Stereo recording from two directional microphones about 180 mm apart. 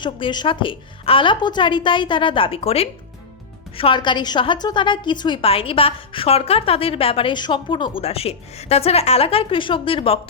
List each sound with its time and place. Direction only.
0.0 s a woman's voice: 25° left (ahead or behind)